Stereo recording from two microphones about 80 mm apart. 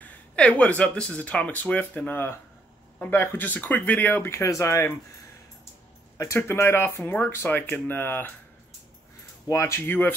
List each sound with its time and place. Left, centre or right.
0.0 s speech: centre; by 4.9 s left
6.1 s speech: left
9.5 s speech: left
9.8 s speech: left